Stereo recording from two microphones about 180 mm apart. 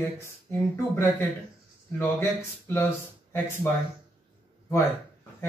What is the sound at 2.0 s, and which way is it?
Speech, 15° left (ahead or behind).